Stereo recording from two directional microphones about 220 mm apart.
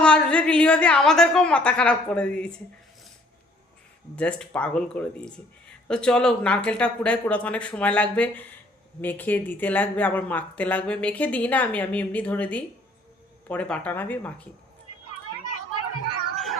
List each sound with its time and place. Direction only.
0.0 s speech: 5° left (ahead or behind)
4.1 s speech: 5° left (ahead or behind)